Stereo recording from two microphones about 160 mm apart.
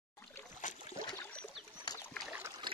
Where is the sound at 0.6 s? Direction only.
50° left (ahead or behind).